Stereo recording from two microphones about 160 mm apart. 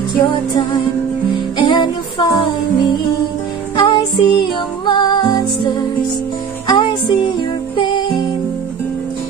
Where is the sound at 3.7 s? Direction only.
30° left (ahead or behind).